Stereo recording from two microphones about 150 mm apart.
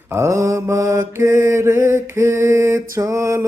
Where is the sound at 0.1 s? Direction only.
20° right (ahead or behind).